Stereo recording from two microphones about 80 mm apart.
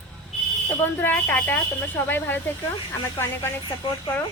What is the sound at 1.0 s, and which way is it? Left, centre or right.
A woman's voice, left.